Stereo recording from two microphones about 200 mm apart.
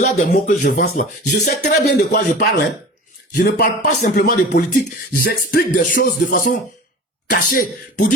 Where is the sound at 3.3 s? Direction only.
50° left (ahead or behind).